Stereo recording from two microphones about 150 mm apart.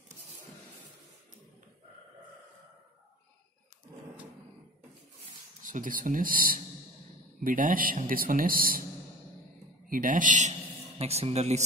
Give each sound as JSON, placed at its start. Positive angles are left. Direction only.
{"t": 5.6, "sound": "a man's voice", "side_deg": -60}
{"t": 9.8, "sound": "speech", "side_deg": -65}
{"t": 11.0, "sound": "speech", "side_deg": -45}